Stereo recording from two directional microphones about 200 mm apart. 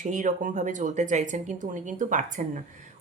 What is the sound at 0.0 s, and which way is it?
Speech, 40° right (ahead or behind).